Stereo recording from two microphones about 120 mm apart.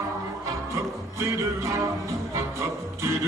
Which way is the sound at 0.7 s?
25° right (ahead or behind).